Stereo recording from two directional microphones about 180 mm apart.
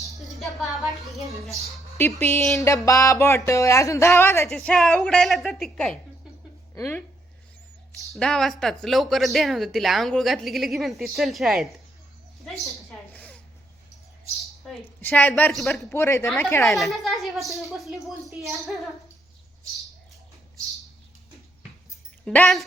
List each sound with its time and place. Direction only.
0.0 s music: centre (ahead or behind)
1.2 s a woman's voice: 15° right (ahead or behind)
2.0 s music: 15° left (ahead or behind)
4.4 s speech: 5° left (ahead or behind)
7.9 s speech: centre (ahead or behind)
12.5 s a sound: centre (ahead or behind)
14.7 s music: 10° left (ahead or behind)
15.9 s music: 15° left (ahead or behind)
16.6 s speech: centre (ahead or behind)
22.2 s speech: centre (ahead or behind)